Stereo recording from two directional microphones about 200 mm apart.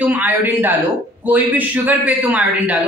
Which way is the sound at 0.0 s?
10° right (ahead or behind).